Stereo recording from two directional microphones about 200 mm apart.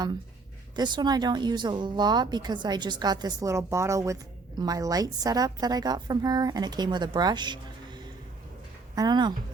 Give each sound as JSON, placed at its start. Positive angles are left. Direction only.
{"t": 0.8, "sound": "a woman's voice", "side_deg": -20}